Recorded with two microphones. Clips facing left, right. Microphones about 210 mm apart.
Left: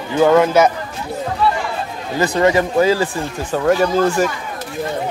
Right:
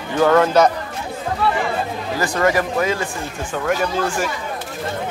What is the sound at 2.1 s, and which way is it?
Speech, 25° left (ahead or behind).